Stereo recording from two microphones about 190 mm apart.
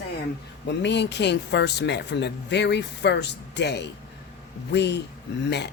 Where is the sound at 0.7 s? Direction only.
65° left (ahead or behind).